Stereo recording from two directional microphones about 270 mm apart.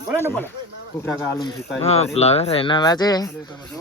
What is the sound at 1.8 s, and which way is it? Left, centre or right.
Speech, left.